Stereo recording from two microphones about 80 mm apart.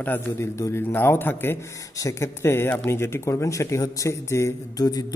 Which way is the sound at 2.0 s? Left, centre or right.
Left.